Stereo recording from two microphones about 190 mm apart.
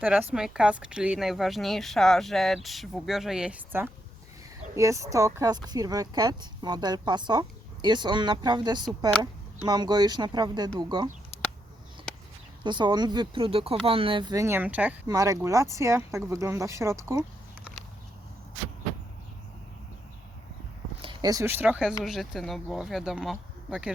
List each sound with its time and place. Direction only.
0.0 s a woman's voice: 10° right (ahead or behind)
12.6 s speech: 25° right (ahead or behind)
15.0 s speech: 20° right (ahead or behind)
21.0 s a woman's voice: 25° right (ahead or behind); by 23.9 s 5° right (ahead or behind)